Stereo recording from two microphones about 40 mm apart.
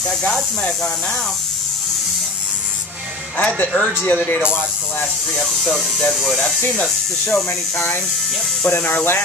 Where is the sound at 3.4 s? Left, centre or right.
Left.